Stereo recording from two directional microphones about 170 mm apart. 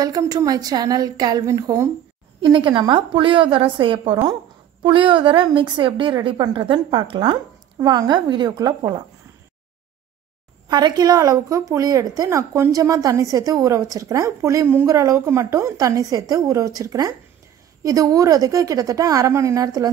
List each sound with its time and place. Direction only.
0.0 s a woman's voice: 20° right (ahead or behind)
2.4 s a woman's voice: 30° right (ahead or behind)
10.7 s a woman's voice: 25° right (ahead or behind)